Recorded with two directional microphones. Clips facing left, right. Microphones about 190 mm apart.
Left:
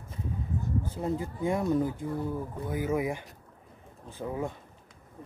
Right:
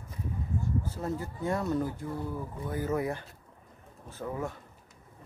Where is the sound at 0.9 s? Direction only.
15° left (ahead or behind).